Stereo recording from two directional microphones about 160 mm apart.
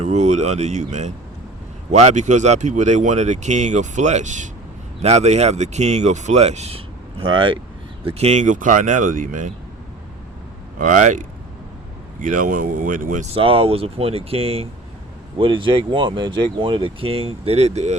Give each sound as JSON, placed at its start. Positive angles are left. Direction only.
{"t": 0.0, "sound": "speech", "side_deg": -45}
{"t": 8.0, "sound": "speech", "side_deg": -45}
{"t": 10.8, "sound": "speech", "side_deg": -55}
{"t": 13.2, "sound": "speech", "side_deg": -35}